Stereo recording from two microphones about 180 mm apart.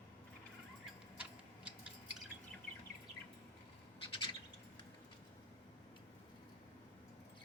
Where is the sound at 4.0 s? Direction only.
30° left (ahead or behind).